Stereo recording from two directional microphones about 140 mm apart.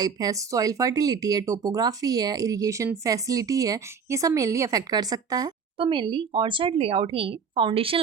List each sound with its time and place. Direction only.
0.0 s speech: 25° right (ahead or behind)